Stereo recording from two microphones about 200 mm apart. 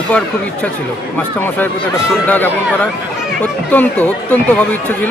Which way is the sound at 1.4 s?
10° left (ahead or behind).